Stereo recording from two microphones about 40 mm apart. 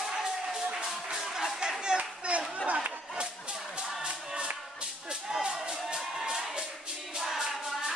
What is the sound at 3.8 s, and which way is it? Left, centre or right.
Music, right.